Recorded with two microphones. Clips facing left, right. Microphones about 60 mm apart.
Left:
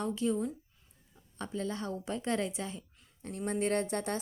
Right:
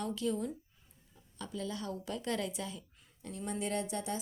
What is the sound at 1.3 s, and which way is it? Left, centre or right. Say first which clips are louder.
A woman's voice: left 4 dB; left.